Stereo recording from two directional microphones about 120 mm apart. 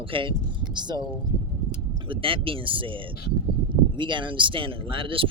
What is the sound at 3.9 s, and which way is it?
Speech, 40° right (ahead or behind).